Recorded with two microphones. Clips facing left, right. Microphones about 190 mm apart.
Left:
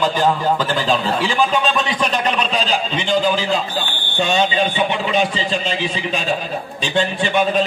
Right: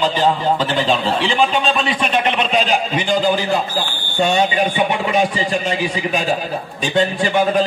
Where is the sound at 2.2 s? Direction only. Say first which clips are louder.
Right 2 dB; 35° left (ahead or behind).